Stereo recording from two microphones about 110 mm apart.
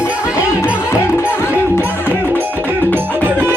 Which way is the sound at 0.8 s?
25° left (ahead or behind).